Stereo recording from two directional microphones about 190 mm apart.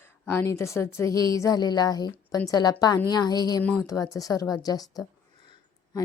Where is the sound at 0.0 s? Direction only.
15° left (ahead or behind).